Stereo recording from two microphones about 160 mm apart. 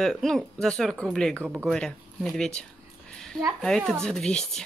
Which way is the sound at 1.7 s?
5° left (ahead or behind).